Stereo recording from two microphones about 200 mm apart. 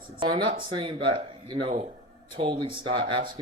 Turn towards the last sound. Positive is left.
turn(degrees=-25)  # may be behind; listen again after turning